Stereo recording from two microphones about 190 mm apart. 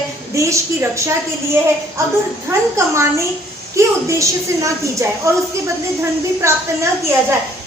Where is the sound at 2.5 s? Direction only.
15° right (ahead or behind).